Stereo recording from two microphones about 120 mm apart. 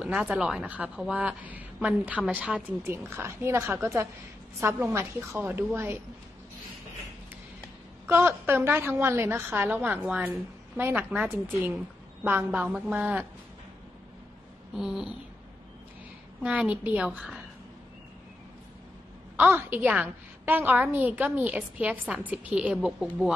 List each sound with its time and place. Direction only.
0.0 s a woman's voice: 10° right (ahead or behind)
2.8 s a woman's voice: 20° right (ahead or behind)
8.1 s a woman's voice: 20° right (ahead or behind)
14.8 s a sound: 5° right (ahead or behind)
16.4 s a woman's voice: 10° right (ahead or behind)
19.3 s a woman's voice: 15° right (ahead or behind)